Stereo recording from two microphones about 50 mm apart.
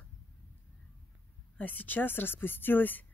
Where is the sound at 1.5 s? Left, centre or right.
Left.